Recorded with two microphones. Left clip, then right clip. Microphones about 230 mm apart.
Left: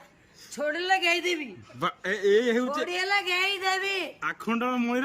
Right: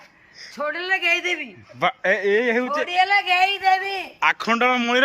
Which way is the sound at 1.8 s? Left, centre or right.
Centre.